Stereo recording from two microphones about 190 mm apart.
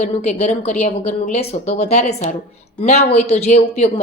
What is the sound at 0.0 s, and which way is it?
A woman's voice, 35° left (ahead or behind).